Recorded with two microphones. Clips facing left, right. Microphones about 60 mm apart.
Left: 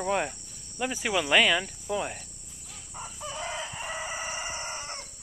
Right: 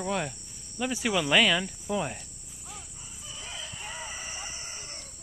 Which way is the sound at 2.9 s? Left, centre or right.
Left.